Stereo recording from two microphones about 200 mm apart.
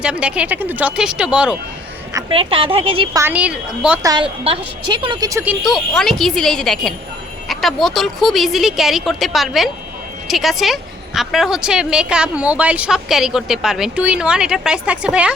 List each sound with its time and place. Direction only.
0.0 s speech: 5° right (ahead or behind)
2.3 s a woman's voice: 25° right (ahead or behind)
3.2 s a woman's voice: 10° right (ahead or behind)
4.0 s a woman's voice: 20° right (ahead or behind)
5.6 s speech: centre (ahead or behind)